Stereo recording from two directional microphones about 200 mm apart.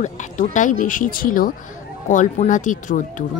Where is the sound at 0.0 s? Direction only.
35° left (ahead or behind).